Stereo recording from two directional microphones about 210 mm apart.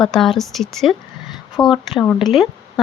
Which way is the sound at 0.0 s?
Centre (ahead or behind).